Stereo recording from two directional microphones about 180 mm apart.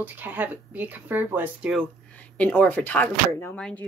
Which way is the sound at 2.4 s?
10° left (ahead or behind).